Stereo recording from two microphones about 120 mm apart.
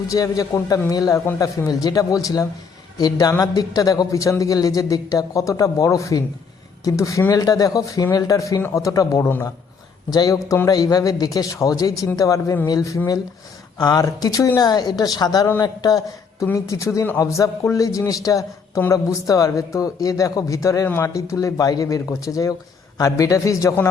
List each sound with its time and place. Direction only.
0.1 s a man's voice: 30° left (ahead or behind)